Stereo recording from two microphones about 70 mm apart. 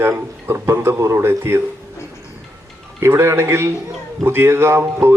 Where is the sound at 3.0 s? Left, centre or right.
Right.